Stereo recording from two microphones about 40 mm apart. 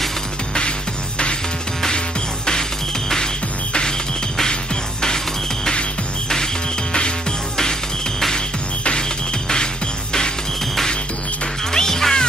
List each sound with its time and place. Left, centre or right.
5.7 s music: centre
11.7 s music: centre